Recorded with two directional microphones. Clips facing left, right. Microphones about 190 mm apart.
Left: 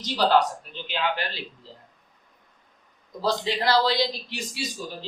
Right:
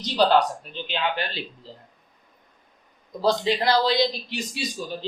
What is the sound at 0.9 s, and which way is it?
Speech, 25° right (ahead or behind).